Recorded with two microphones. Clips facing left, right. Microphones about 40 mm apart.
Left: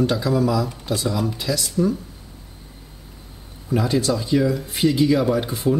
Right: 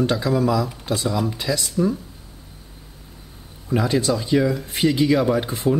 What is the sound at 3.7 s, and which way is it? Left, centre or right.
Speech, centre.